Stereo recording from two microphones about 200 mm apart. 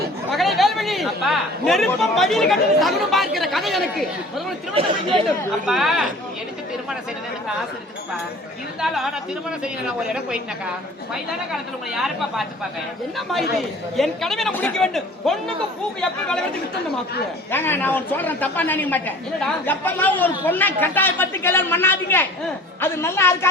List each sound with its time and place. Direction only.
0.3 s chatter: centre (ahead or behind)
2.1 s speech: centre (ahead or behind)
4.7 s speech: 25° right (ahead or behind)
5.6 s speech: centre (ahead or behind)
8.8 s speech: centre (ahead or behind)
13.6 s speech: centre (ahead or behind)
17.5 s a man's voice: 10° left (ahead or behind)